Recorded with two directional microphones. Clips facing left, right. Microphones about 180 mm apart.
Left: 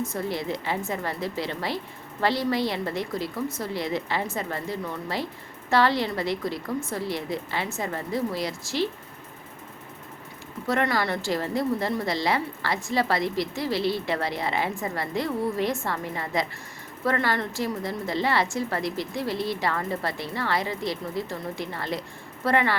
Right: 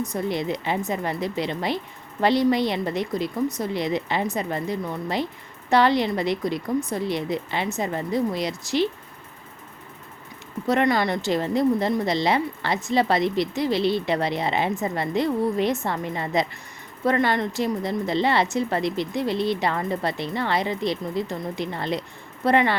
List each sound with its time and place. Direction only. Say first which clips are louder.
0.0 s a woman's voice: right 3 dB; 20° right (ahead or behind)
10.7 s a woman's voice: right 4 dB; 20° right (ahead or behind)